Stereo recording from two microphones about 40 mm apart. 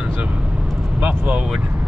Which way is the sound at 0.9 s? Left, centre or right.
Right.